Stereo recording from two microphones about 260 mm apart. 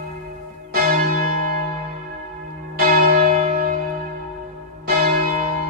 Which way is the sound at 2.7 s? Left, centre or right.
Right.